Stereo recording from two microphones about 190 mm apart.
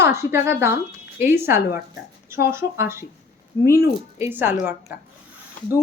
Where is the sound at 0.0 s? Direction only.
15° right (ahead or behind).